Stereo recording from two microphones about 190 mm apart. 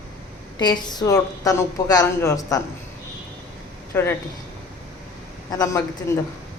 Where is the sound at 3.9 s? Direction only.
10° left (ahead or behind).